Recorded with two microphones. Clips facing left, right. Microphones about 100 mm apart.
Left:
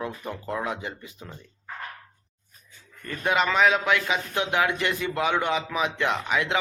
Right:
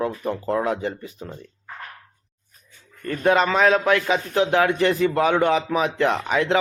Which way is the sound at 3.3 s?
35° right (ahead or behind).